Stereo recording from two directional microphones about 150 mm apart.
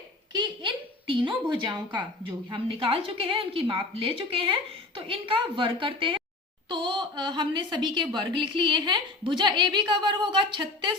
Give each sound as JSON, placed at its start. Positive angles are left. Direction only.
{"t": 0.3, "sound": "a woman's voice", "side_deg": -35}